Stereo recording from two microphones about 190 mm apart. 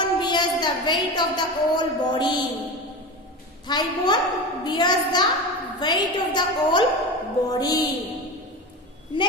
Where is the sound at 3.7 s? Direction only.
20° left (ahead or behind).